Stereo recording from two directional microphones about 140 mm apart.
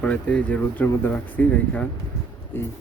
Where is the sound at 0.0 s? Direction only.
10° left (ahead or behind).